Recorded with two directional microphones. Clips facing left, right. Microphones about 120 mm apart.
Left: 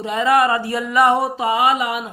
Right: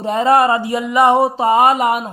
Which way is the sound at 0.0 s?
40° right (ahead or behind).